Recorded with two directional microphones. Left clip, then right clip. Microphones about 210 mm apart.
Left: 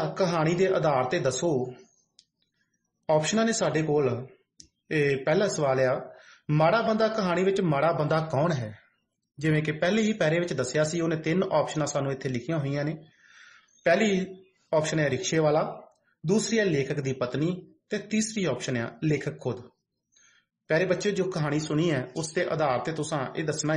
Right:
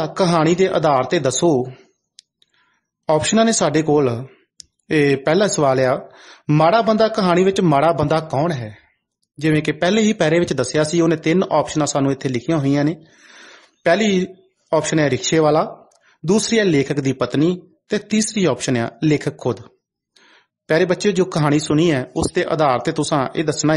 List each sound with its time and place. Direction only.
0.0 s speech: 45° right (ahead or behind)
3.1 s speech: 45° right (ahead or behind)
14.7 s speech: 45° right (ahead or behind)